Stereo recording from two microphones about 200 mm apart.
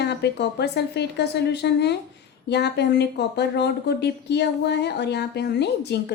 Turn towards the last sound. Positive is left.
turn(degrees=55)  # may be behind; listen again after turning